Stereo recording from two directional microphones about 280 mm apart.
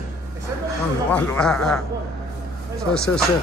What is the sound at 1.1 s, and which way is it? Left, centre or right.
Speech, centre.